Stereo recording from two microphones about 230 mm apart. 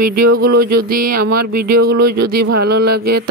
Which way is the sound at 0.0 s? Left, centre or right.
Right.